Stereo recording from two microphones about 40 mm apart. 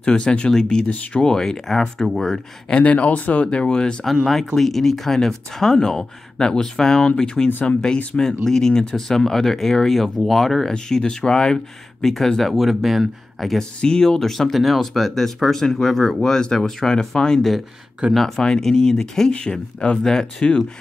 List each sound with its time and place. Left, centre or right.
0.0 s speech: left
2.7 s speech: left
4.0 s speech: centre
10.7 s speech: centre
12.1 s speech: centre
13.6 s speech: centre
19.3 s speech: left
20.0 s speech: centre
20.3 s speech: left